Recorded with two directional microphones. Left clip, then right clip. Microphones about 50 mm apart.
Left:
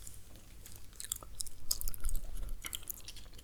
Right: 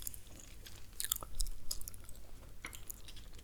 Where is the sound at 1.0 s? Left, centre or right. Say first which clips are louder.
Right 4 dB; right.